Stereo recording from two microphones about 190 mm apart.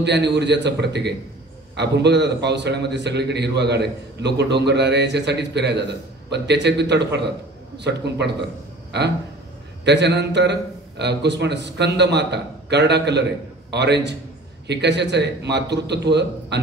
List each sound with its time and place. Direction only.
0.0 s a man's voice: 65° right (ahead or behind)